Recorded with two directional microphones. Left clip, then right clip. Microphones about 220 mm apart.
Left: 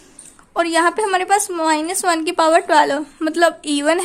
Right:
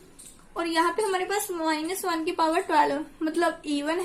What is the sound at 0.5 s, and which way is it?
A woman's voice, 45° left (ahead or behind).